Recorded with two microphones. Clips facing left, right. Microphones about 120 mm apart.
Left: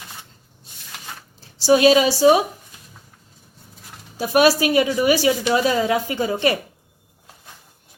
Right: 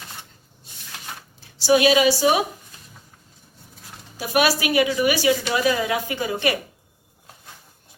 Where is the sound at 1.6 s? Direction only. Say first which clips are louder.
Left 2 dB; 35° left (ahead or behind).